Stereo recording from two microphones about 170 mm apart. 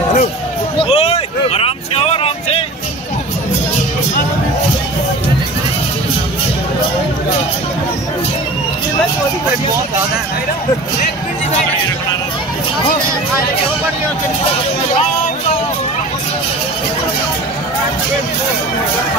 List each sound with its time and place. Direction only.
0.8 s vehicle: 35° left (ahead or behind)